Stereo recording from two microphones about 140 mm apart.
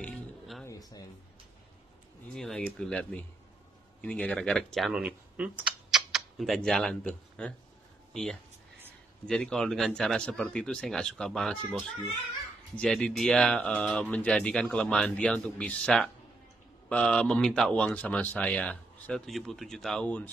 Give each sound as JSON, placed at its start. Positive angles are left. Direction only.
{"t": 0.0, "sound": "music", "side_deg": 5}
{"t": 0.7, "sound": "a sound", "side_deg": 25}
{"t": 2.3, "sound": "speech", "side_deg": 5}